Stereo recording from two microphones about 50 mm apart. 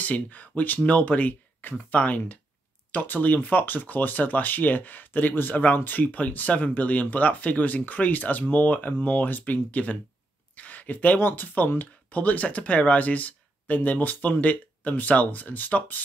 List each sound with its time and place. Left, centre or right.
0.0 s speech: left
10.5 s a sound: left
11.2 s speech: left